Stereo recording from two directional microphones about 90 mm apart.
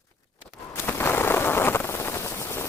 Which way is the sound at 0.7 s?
25° left (ahead or behind).